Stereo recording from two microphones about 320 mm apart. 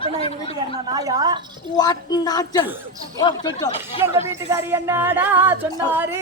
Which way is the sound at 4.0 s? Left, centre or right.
Centre.